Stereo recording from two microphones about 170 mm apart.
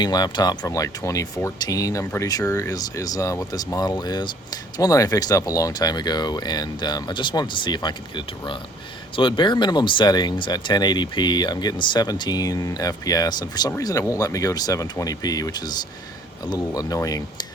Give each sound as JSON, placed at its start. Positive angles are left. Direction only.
{"t": 0.0, "sound": "speech", "side_deg": 25}